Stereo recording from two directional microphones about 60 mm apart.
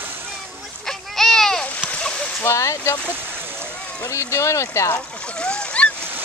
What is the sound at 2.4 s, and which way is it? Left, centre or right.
Speech, left.